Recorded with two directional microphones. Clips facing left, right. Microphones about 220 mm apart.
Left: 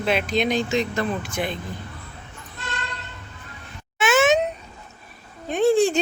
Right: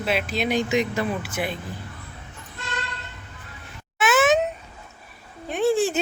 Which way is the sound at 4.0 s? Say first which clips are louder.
Left 1 dB; centre (ahead or behind).